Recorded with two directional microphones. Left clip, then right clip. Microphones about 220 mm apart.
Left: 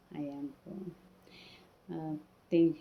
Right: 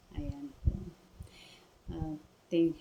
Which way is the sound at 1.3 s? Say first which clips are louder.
Left 1 dB; 15° right (ahead or behind).